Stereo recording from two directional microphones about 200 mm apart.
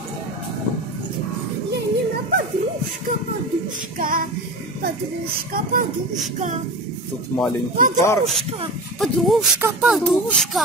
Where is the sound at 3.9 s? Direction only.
45° right (ahead or behind).